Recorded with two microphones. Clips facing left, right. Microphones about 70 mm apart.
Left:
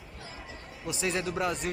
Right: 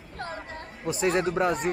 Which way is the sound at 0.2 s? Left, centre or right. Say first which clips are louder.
Right 10 dB; right.